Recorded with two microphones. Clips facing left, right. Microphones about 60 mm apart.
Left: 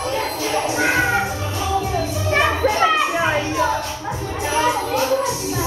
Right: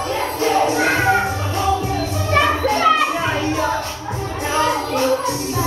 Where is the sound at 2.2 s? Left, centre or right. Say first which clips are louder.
Right 2 dB; centre.